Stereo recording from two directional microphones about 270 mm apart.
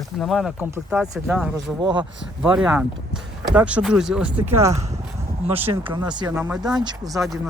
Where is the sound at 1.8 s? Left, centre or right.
Centre.